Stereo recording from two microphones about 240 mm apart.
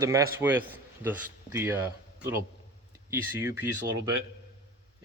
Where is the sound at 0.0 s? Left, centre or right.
Centre.